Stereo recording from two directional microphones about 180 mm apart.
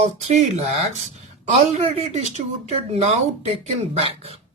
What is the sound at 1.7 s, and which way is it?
Speech, 35° right (ahead or behind).